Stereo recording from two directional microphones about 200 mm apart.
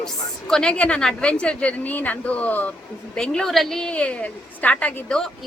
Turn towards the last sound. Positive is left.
turn(degrees=5)  # may be behind; listen again after turning